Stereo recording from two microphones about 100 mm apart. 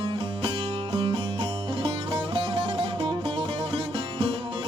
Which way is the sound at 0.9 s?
60° right (ahead or behind).